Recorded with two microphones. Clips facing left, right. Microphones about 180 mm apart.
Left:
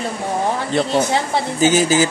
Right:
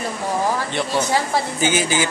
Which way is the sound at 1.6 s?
40° left (ahead or behind).